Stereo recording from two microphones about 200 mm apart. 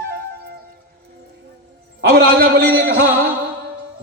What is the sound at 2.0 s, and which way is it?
Speech, 55° right (ahead or behind).